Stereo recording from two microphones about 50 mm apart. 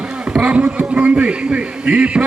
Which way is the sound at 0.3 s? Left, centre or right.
Right.